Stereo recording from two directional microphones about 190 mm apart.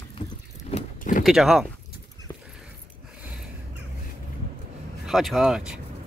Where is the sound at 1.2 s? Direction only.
Centre (ahead or behind).